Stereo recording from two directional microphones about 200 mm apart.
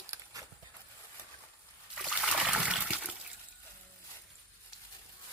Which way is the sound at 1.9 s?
Centre (ahead or behind).